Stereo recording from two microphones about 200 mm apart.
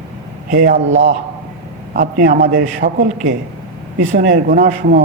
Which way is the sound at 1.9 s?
40° right (ahead or behind).